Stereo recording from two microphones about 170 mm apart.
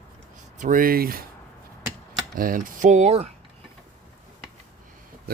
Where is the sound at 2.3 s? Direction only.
55° right (ahead or behind).